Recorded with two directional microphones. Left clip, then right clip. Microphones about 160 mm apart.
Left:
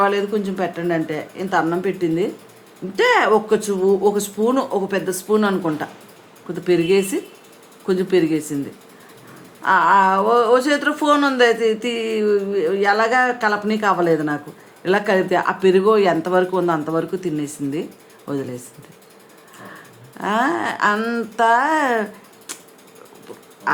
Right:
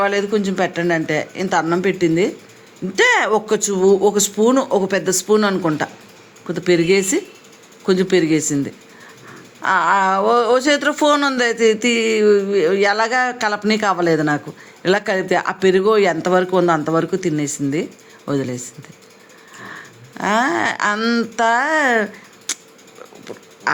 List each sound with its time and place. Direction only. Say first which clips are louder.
0.0 s speech: right 1 dB; 25° right (ahead or behind)
9.6 s speech: left 1 dB; 25° right (ahead or behind)
19.7 s speech: right 5 dB; 20° right (ahead or behind)
21.0 s speech: right 1 dB; 10° right (ahead or behind)
23.7 s duck: right 1 dB; 25° right (ahead or behind)